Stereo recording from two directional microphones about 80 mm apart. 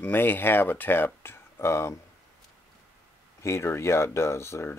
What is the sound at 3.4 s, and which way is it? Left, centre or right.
Speech, left.